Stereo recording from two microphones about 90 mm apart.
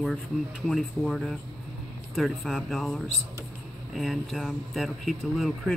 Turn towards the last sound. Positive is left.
turn(degrees=0)  # may be behind; listen again after turning